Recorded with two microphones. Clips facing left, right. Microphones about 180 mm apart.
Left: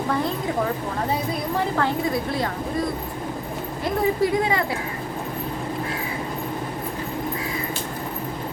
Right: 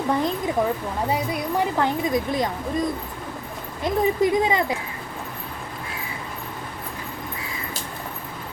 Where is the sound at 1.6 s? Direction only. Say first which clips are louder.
Even; 15° right (ahead or behind).